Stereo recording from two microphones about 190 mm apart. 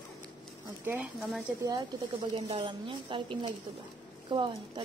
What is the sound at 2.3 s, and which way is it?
A woman's voice, 30° right (ahead or behind).